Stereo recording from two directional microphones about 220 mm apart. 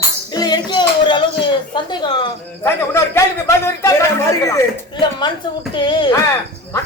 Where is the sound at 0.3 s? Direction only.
20° left (ahead or behind).